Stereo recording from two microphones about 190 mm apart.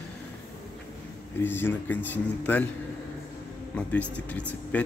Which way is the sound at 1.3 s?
10° left (ahead or behind).